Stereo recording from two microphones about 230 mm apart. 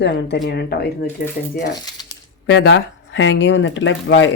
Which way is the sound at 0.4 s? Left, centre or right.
Left.